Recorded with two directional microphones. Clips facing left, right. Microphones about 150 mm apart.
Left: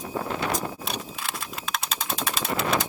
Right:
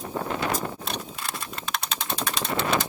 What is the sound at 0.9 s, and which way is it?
Pigeon, centre (ahead or behind).